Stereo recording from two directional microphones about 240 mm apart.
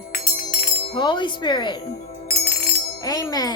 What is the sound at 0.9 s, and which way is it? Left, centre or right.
Wind chime, centre.